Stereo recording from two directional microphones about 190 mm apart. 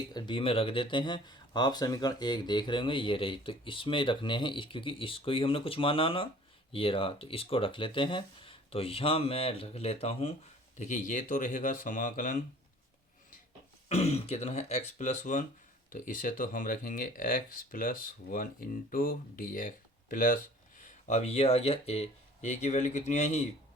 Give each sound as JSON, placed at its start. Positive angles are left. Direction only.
{"t": 0.1, "sound": "speech", "side_deg": 25}
{"t": 13.8, "sound": "speech", "side_deg": 35}